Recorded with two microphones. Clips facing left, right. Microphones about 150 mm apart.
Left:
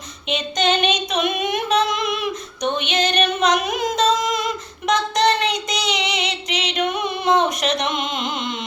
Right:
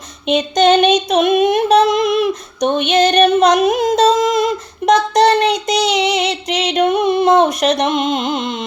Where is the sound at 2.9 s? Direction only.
35° right (ahead or behind).